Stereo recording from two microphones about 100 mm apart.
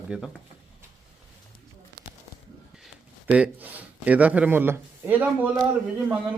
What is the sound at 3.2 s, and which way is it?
Speech, 15° right (ahead or behind).